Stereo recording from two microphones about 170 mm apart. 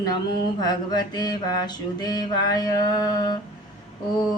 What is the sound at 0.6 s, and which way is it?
Mantra, 25° left (ahead or behind).